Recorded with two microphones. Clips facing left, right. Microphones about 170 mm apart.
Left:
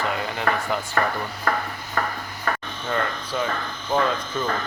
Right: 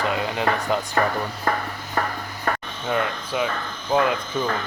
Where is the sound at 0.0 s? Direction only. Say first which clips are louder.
Right 2 dB; 20° right (ahead or behind).